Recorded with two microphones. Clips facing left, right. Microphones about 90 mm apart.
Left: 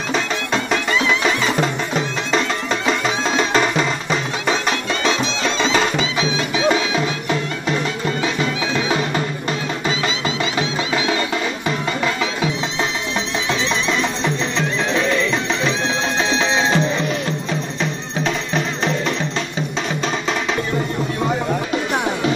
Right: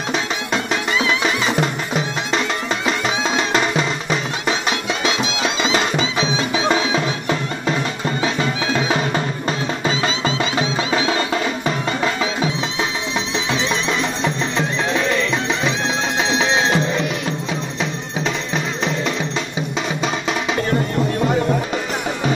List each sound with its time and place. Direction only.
3.3 s music: 5° right (ahead or behind)
5.0 s music: 5° right (ahead or behind)
10.2 s music: 20° right (ahead or behind)
16.2 s music: 10° right (ahead or behind)